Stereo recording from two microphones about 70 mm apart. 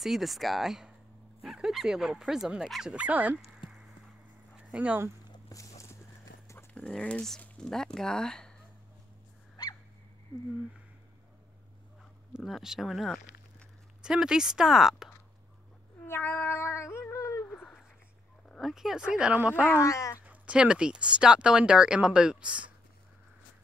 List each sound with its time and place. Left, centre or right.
0.0 s speech: centre
3.0 s speech: right
4.7 s speech: right
5.5 s walk: left
6.7 s speech: centre
9.6 s dog: left
12.4 s speech: centre
16.1 s speech: left
18.6 s speech: centre
19.8 s speech: left
20.2 s speech: centre